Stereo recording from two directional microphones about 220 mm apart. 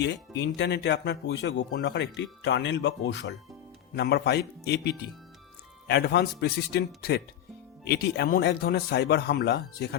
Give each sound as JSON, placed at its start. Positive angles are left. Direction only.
{"t": 0.0, "sound": "speech", "side_deg": 50}